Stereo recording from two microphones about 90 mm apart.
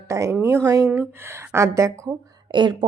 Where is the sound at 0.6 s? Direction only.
40° right (ahead or behind).